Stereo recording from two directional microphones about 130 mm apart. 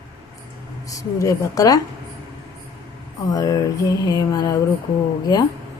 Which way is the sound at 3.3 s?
30° left (ahead or behind).